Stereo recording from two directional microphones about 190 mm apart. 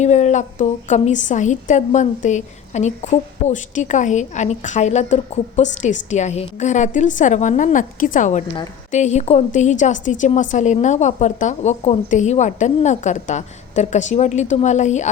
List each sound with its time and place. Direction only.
0.0 s a woman's voice: 40° left (ahead or behind)